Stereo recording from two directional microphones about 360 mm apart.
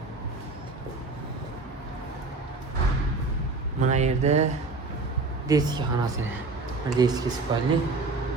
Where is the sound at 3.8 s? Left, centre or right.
Centre.